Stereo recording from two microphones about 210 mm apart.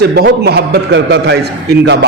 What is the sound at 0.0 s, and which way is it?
A man's voice, 50° right (ahead or behind).